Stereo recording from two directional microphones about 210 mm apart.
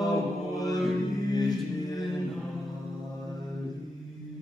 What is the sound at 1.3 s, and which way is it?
Music, 20° left (ahead or behind).